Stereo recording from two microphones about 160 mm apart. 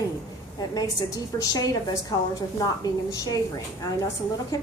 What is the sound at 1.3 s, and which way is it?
A woman's voice, 25° left (ahead or behind).